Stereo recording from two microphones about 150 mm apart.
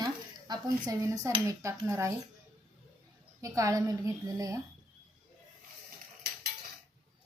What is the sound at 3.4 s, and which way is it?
A woman's voice, 20° right (ahead or behind).